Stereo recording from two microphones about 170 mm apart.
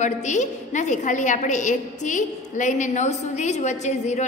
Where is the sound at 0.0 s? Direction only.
45° left (ahead or behind).